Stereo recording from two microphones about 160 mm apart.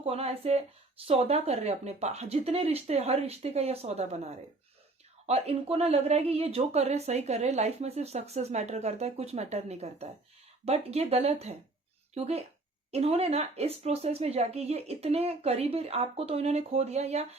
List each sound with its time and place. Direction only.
0.0 s speech: 40° right (ahead or behind)